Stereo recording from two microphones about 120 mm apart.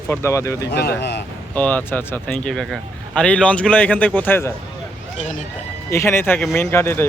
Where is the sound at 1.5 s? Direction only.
15° left (ahead or behind).